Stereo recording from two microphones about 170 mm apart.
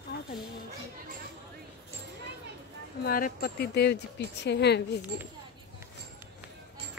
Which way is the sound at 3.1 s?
60° left (ahead or behind).